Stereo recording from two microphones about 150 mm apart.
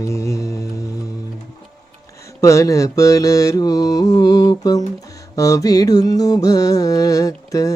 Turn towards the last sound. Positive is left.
turn(degrees=20)  # may be behind; listen again after turning